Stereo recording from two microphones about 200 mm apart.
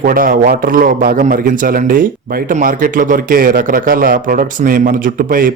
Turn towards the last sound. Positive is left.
turn(degrees=-45)  # may be behind; listen again after turning